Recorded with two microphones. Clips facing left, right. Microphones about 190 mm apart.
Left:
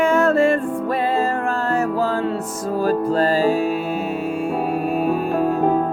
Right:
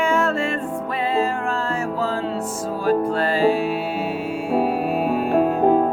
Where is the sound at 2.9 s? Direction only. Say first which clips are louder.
Even; 40° left (ahead or behind).